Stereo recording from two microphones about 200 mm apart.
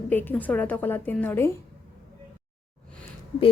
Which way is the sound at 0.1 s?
10° left (ahead or behind).